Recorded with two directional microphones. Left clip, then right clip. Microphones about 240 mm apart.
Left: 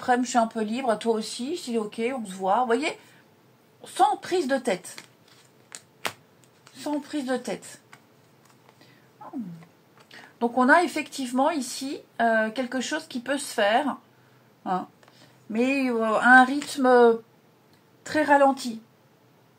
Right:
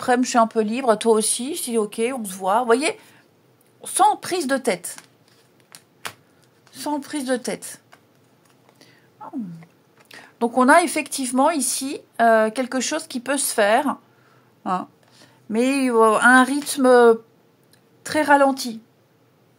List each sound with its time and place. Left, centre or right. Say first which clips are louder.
0.0 s a woman's voice: right 5 dB; right
6.8 s a woman's voice: right 4 dB; right
10.0 s a woman's voice: right 4 dB; right